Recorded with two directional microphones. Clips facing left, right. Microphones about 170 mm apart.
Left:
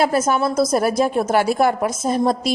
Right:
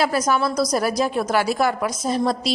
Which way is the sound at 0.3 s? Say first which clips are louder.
Left 3 dB; 50° left (ahead or behind).